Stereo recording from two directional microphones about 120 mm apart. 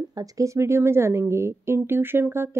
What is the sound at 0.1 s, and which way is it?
A woman's voice, 30° right (ahead or behind).